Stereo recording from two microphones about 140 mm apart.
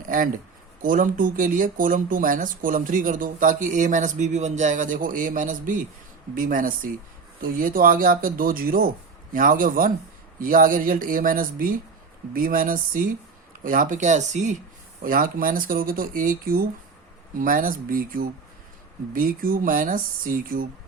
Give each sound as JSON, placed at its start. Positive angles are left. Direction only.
{"t": 0.1, "sound": "speech", "side_deg": -75}
{"t": 15.0, "sound": "speech", "side_deg": -90}